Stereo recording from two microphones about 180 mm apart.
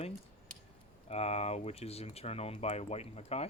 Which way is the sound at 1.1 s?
35° left (ahead or behind).